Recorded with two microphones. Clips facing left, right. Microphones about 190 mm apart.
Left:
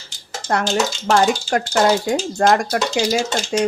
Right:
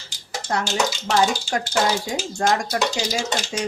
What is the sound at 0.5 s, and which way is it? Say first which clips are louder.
Speech: left 4 dB; 60° left (ahead or behind).